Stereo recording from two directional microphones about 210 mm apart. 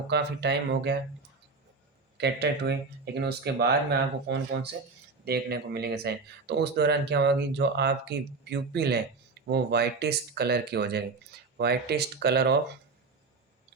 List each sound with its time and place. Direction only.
0.1 s speech: 55° right (ahead or behind)
2.1 s speech: 55° right (ahead or behind)